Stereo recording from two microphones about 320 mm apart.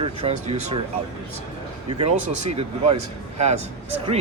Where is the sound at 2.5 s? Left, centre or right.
Centre.